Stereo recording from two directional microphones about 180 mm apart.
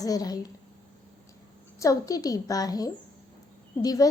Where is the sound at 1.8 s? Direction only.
20° left (ahead or behind).